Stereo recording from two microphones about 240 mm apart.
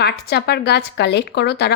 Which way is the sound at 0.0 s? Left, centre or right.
Left.